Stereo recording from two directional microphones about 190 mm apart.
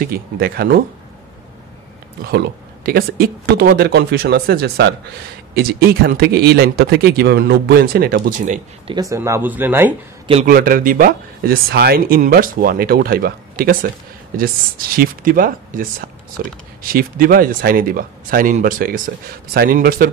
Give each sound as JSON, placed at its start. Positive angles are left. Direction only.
{"t": 0.0, "sound": "speech", "side_deg": -50}
{"t": 2.3, "sound": "speech", "side_deg": -55}
{"t": 9.1, "sound": "speech", "side_deg": -15}
{"t": 10.4, "sound": "speech", "side_deg": -50}